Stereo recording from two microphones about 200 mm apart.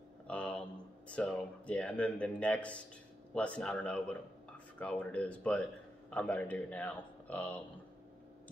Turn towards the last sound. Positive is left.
turn(degrees=5)  # may be behind; listen again after turning